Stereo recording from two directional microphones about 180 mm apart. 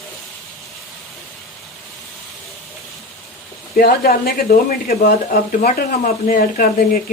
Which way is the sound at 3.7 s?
55° left (ahead or behind).